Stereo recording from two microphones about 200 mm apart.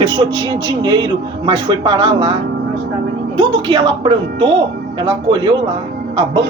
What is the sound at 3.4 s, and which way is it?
A man's voice, 25° right (ahead or behind).